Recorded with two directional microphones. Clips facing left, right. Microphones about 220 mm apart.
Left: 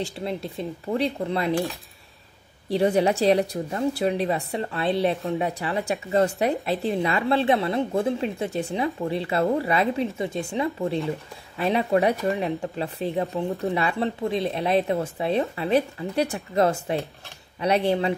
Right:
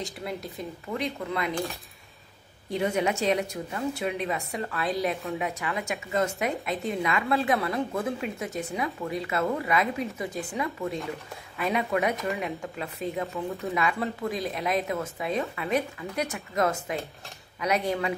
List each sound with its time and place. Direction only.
0.2 s speech: 30° left (ahead or behind)
2.7 s speech: 35° left (ahead or behind)